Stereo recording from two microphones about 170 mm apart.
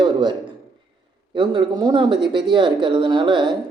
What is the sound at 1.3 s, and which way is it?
Speech, 25° right (ahead or behind).